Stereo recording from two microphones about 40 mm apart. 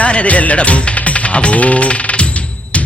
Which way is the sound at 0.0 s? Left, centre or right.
Left.